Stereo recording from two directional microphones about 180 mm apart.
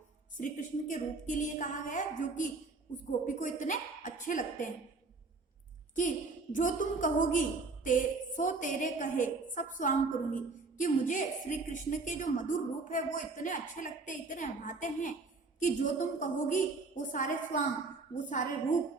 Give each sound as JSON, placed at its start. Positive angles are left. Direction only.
{"t": 0.3, "sound": "a woman's voice", "side_deg": 45}
{"t": 6.0, "sound": "a woman's voice", "side_deg": 45}